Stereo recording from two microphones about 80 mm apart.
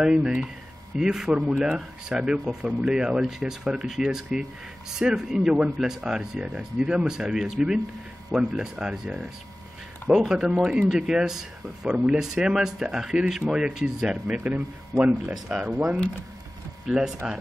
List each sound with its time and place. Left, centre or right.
0.0 s speech: centre
14.2 s speech: centre